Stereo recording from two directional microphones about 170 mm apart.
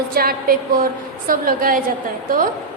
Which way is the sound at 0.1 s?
60° right (ahead or behind).